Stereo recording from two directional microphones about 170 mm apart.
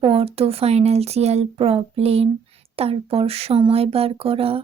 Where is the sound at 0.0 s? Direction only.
35° right (ahead or behind).